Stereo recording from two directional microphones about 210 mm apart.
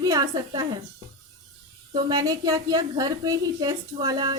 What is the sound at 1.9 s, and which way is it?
A woman's voice, 20° right (ahead or behind).